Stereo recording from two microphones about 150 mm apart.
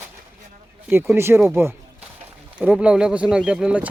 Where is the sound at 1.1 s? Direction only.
15° right (ahead or behind).